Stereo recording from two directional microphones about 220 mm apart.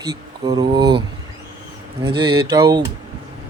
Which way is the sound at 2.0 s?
20° right (ahead or behind).